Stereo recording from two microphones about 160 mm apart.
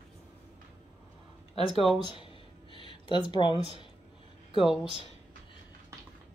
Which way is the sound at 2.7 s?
30° left (ahead or behind).